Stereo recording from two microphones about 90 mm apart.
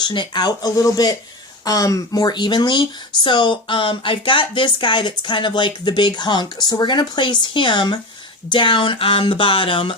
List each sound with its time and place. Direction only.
0.0 s speech: 55° left (ahead or behind); by 2.3 s 40° left (ahead or behind)
2.3 s speech: 55° left (ahead or behind)
3.2 s speech: 65° left (ahead or behind)